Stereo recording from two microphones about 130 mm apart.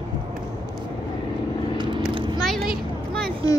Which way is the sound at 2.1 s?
40° right (ahead or behind).